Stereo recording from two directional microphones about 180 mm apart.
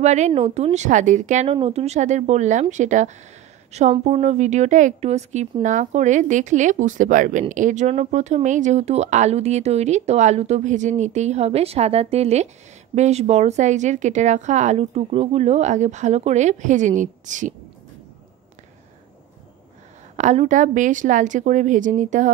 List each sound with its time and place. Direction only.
0.0 s a woman's voice: 40° right (ahead or behind)
20.2 s a woman's voice: 40° right (ahead or behind)